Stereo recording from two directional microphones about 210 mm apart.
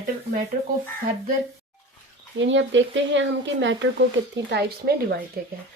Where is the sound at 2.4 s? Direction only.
60° right (ahead or behind).